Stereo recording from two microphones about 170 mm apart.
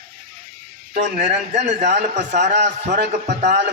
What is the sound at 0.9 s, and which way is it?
A man's voice, 45° right (ahead or behind).